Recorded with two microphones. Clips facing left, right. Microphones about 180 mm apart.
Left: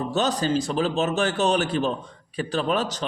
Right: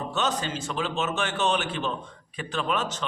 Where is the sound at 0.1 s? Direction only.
35° left (ahead or behind).